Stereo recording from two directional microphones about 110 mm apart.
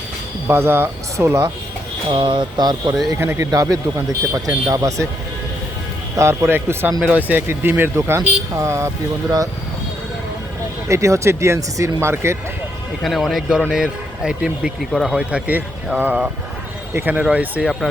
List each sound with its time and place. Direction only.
0.4 s speech: 20° right (ahead or behind)
2.0 s speech: 50° right (ahead or behind)
3.2 s speech: 25° right (ahead or behind)
6.1 s speech: 25° right (ahead or behind)
10.8 s speech: 30° right (ahead or behind)
13.0 s a man's voice: centre (ahead or behind); by 17.7 s 15° right (ahead or behind)